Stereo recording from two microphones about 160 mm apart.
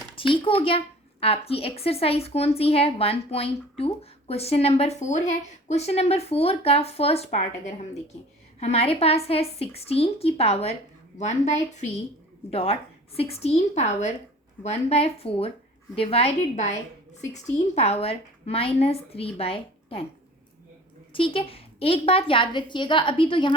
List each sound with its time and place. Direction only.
0.4 s a woman's voice: 35° left (ahead or behind)
8.5 s a woman's voice: 40° left (ahead or behind)
21.1 s a woman's voice: 35° left (ahead or behind)